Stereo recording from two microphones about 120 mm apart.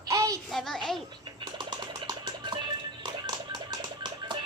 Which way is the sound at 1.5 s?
40° right (ahead or behind).